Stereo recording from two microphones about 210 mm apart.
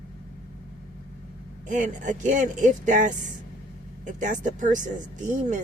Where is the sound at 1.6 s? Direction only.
35° right (ahead or behind).